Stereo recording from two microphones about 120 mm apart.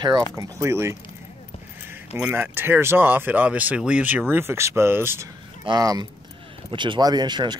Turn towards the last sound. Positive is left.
turn(degrees=-40)  # may be behind; listen again after turning